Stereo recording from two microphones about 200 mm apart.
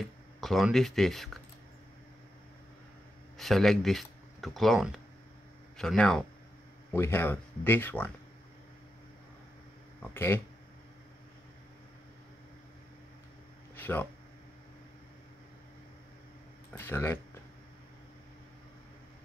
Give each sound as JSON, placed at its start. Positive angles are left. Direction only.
{"t": 0.4, "sound": "speech", "side_deg": 0}
{"t": 3.3, "sound": "speech", "side_deg": 0}
{"t": 10.1, "sound": "speech", "side_deg": 10}
{"t": 13.7, "sound": "a sound", "side_deg": 10}
{"t": 16.7, "sound": "speech", "side_deg": 10}